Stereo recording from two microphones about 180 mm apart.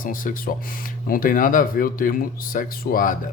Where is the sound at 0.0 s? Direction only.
50° left (ahead or behind).